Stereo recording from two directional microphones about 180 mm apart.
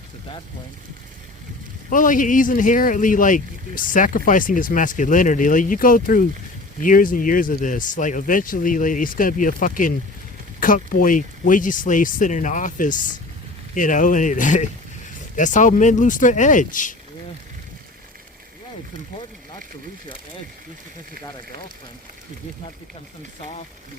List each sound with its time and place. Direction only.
1.9 s speech: 45° left (ahead or behind)